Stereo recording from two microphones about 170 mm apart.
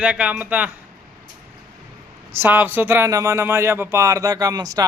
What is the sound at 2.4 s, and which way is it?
Speech, 10° right (ahead or behind).